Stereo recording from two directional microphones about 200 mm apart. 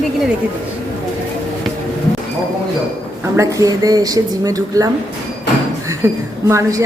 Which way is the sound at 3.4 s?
15° right (ahead or behind).